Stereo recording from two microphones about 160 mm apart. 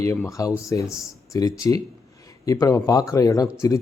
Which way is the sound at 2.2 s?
20° left (ahead or behind).